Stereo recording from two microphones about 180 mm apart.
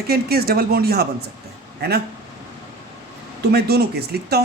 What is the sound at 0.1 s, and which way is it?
Speech, 60° right (ahead or behind).